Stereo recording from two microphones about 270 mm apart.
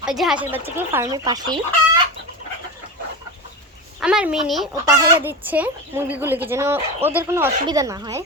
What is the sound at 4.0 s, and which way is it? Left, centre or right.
A woman's voice, centre.